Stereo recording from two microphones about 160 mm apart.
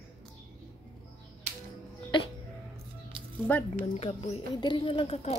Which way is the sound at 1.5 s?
45° right (ahead or behind).